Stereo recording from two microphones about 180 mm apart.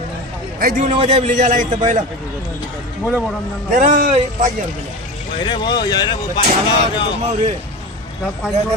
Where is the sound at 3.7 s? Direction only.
50° right (ahead or behind).